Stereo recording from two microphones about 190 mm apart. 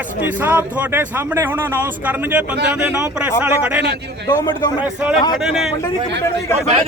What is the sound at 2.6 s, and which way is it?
Speech, 5° right (ahead or behind).